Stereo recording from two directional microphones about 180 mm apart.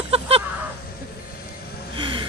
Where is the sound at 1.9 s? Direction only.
30° right (ahead or behind).